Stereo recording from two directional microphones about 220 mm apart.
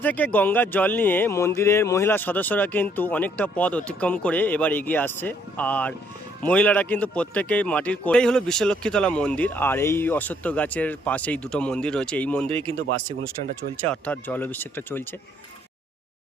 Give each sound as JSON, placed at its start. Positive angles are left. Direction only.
{"t": 0.0, "sound": "a man's voice", "side_deg": 5}
{"t": 12.5, "sound": "speech", "side_deg": -25}
{"t": 13.8, "sound": "speech", "side_deg": 5}